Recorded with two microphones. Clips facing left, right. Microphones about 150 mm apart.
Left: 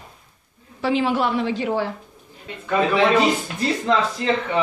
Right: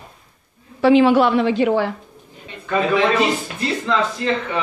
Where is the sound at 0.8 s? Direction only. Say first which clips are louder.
Right 8 dB; 70° right (ahead or behind).